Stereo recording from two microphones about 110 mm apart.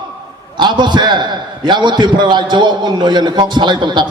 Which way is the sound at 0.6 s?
45° right (ahead or behind).